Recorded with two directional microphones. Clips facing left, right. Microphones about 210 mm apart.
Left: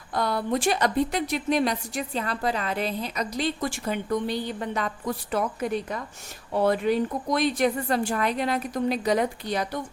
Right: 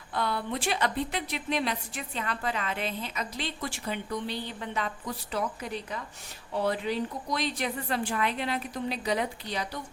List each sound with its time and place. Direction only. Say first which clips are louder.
0.1 s a woman's voice: left 5 dB; 40° left (ahead or behind)